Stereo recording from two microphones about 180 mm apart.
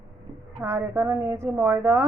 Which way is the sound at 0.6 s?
15° right (ahead or behind).